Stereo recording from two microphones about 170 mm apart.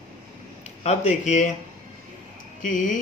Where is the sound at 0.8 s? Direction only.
40° left (ahead or behind).